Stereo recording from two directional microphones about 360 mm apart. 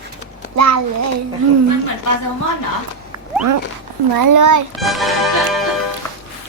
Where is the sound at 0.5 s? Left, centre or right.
Right.